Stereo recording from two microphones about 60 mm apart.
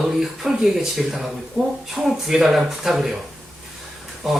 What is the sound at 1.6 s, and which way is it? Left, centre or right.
Speech, right.